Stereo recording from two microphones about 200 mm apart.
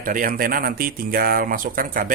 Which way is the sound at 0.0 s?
45° right (ahead or behind).